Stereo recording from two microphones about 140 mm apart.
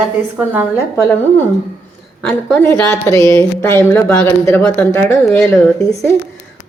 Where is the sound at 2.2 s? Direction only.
5° left (ahead or behind).